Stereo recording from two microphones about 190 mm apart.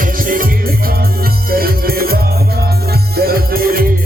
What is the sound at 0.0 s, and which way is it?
Music, 45° right (ahead or behind).